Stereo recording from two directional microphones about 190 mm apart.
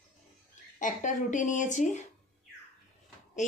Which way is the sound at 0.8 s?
40° left (ahead or behind).